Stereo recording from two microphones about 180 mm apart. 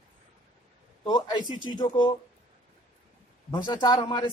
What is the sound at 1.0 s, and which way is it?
A man's voice, 25° left (ahead or behind).